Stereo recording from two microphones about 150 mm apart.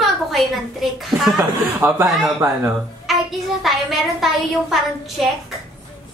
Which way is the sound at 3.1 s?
Centre (ahead or behind).